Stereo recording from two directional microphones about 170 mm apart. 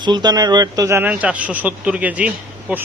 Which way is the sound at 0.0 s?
25° right (ahead or behind).